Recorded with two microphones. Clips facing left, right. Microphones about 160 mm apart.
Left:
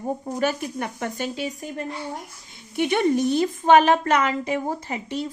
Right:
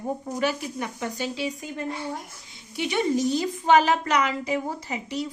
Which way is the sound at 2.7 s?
55° left (ahead or behind).